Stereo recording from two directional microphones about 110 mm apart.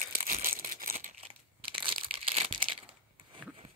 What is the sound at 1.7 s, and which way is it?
Crumpling, 55° right (ahead or behind).